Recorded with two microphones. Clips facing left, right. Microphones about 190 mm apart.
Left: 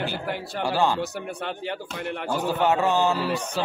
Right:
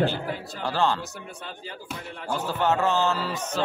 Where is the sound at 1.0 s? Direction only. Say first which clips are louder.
Left 8 dB; 70° left (ahead or behind).